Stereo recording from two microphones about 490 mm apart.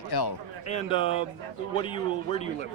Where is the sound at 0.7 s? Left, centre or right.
Centre.